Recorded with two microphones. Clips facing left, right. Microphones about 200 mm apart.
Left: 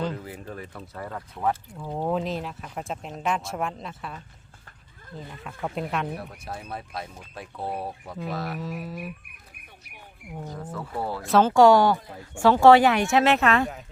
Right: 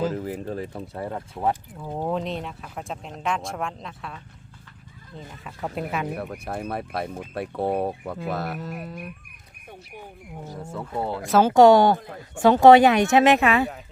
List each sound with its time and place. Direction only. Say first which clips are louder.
0.3 s speech: right 8 dB; 35° right (ahead or behind)
1.8 s speech: left 1 dB; 5° right (ahead or behind)
5.4 s speech: right 1 dB; centre (ahead or behind)
6.4 s speech: right 6 dB; 60° right (ahead or behind)
8.4 s speech: even; centre (ahead or behind)
10.6 s speech: right 4 dB; 25° right (ahead or behind)
11.2 s speech: right 1 dB; centre (ahead or behind)
11.4 s speech: right 3 dB; 20° right (ahead or behind); by 13.8 s 5° right (ahead or behind)